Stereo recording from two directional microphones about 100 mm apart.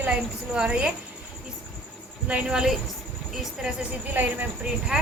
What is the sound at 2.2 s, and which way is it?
A woman's voice, 10° right (ahead or behind).